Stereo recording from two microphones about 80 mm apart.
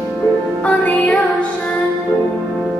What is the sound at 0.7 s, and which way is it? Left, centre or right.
Music, centre.